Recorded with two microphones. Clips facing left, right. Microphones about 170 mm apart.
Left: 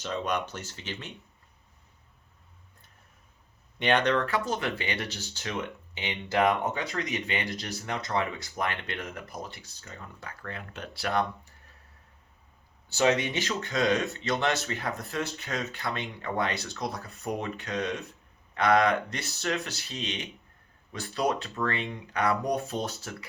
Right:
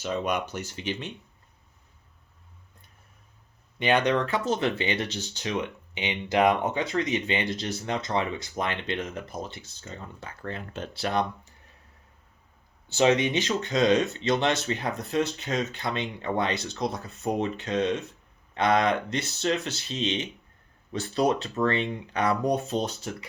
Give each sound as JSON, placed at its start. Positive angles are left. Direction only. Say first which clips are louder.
{"t": 0.0, "sound": "speech", "louder": "right 3 dB", "side_deg": -10}
{"t": 3.8, "sound": "speech", "louder": "right 2 dB", "side_deg": -5}
{"t": 4.1, "sound": "speech", "louder": "right 2 dB", "side_deg": -20}
{"t": 12.9, "sound": "speech", "louder": "right 3 dB", "side_deg": -20}